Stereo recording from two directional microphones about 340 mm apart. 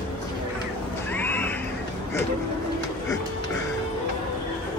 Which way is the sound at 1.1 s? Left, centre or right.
Centre.